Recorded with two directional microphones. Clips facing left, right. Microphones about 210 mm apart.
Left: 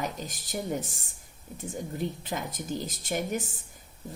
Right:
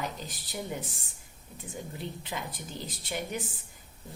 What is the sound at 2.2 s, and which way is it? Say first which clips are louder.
Speech: left 5 dB; 45° left (ahead or behind).